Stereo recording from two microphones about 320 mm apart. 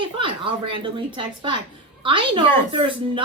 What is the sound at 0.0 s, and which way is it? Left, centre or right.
A woman's voice, centre.